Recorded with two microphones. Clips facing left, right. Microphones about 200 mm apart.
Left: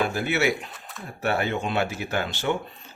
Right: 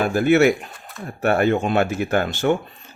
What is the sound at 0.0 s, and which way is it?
Speech, 50° right (ahead or behind).